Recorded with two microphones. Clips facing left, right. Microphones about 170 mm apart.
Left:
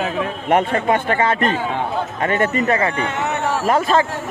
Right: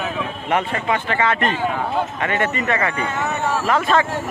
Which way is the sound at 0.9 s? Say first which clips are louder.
Left 3 dB; 45° left (ahead or behind).